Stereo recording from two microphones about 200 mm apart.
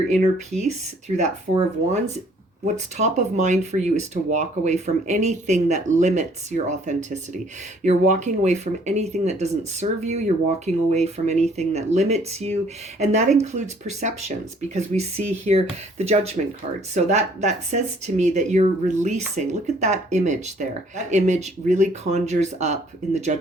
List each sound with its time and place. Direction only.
0.1 s speech: 35° right (ahead or behind)